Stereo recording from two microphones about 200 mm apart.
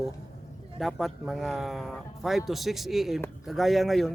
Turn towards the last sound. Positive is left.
turn(degrees=0)  # may be behind; listen again after turning